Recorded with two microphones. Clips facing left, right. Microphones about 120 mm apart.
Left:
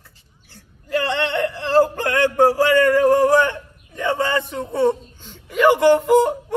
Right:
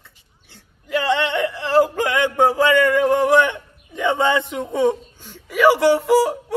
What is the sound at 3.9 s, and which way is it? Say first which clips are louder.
A man's voice: right 2 dB; 15° right (ahead or behind).